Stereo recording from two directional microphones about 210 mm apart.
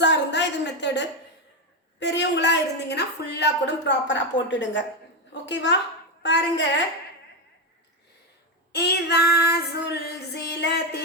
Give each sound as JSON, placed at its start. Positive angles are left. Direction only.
{"t": 0.0, "sound": "a sound", "side_deg": 55}
{"t": 2.0, "sound": "a woman's voice", "side_deg": 55}
{"t": 8.7, "sound": "female singing", "side_deg": 50}